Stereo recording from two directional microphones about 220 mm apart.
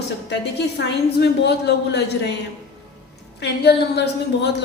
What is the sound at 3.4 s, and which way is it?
Speech, 50° left (ahead or behind).